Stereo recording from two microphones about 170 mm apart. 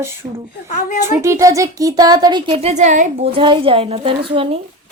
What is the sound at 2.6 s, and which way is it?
A woman's voice, 45° right (ahead or behind).